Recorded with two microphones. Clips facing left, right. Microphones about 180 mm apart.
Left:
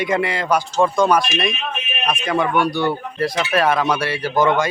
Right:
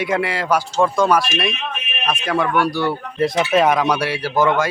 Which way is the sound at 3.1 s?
20° right (ahead or behind).